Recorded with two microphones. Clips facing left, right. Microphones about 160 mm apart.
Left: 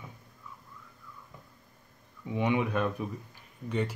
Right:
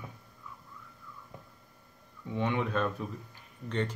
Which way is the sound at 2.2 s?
15° left (ahead or behind).